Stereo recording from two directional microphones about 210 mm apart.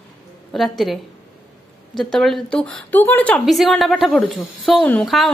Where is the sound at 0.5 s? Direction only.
Centre (ahead or behind).